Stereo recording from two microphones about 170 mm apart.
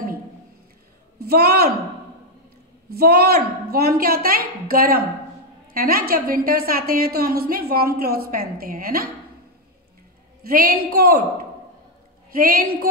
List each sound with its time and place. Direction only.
1.2 s a woman's voice: 70° right (ahead or behind)
3.0 s a woman's voice: 65° right (ahead or behind)
10.5 s a woman's voice: 60° right (ahead or behind)
12.4 s a woman's voice: 60° right (ahead or behind)